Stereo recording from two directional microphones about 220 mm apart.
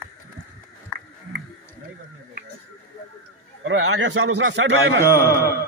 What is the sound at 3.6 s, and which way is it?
A man's voice, 60° right (ahead or behind).